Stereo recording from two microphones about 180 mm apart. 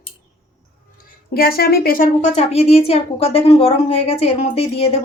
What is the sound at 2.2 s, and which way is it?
A woman's voice, 35° left (ahead or behind).